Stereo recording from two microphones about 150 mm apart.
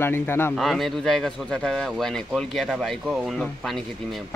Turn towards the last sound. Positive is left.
turn(degrees=0)  # may be behind; listen again after turning